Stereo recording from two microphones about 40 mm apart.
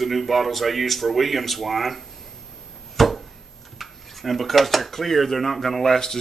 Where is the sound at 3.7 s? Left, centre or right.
Centre.